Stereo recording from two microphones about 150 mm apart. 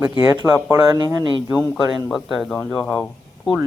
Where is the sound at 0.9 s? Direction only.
25° right (ahead or behind).